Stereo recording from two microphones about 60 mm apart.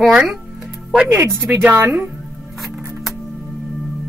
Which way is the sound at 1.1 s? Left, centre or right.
Right.